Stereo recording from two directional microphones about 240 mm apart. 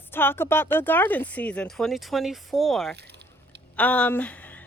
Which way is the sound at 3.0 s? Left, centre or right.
Right.